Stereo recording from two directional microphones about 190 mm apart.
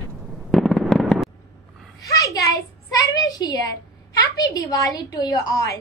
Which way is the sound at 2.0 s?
20° left (ahead or behind).